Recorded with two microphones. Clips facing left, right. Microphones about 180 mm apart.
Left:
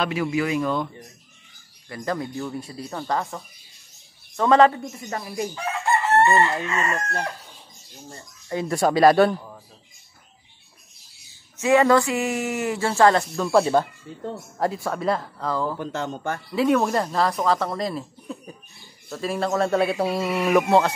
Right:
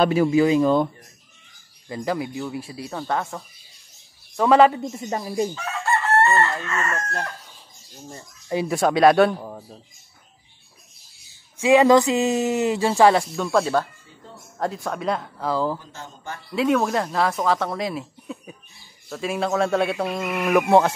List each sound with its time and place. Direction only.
0.0 s speech: 35° right (ahead or behind)
1.9 s speech: 10° right (ahead or behind)
4.7 s speech: 20° right (ahead or behind)
5.5 s chicken: 15° left (ahead or behind)
8.1 s speech: 15° right (ahead or behind)
8.6 s speech: centre (ahead or behind)
9.4 s speech: 40° right (ahead or behind)
11.5 s speech: 15° right (ahead or behind)
13.4 s speech: 5° left (ahead or behind)
15.8 s speech: 70° left (ahead or behind)
16.5 s speech: centre (ahead or behind)